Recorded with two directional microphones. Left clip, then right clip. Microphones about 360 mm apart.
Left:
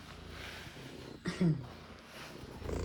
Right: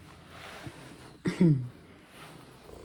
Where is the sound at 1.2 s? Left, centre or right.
Centre.